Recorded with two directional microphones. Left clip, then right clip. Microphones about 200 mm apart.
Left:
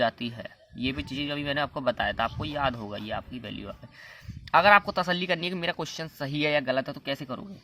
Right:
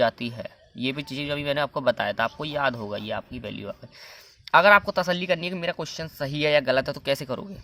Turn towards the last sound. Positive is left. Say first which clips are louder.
# right 7 dB
turn(degrees=-30)  # may be behind; listen again after turning